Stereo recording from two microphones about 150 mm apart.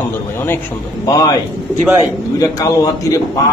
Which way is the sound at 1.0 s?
25° left (ahead or behind).